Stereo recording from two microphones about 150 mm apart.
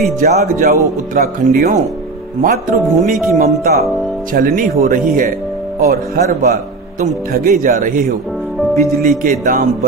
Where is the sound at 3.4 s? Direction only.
50° right (ahead or behind).